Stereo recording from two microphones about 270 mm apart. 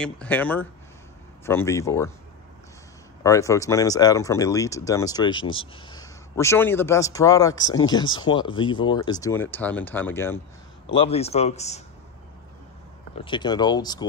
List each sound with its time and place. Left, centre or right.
0.0 s speech: centre
3.3 s speech: centre
11.0 s a man's voice: left
13.2 s speech: centre